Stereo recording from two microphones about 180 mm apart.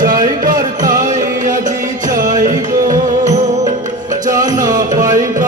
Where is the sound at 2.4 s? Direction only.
45° right (ahead or behind).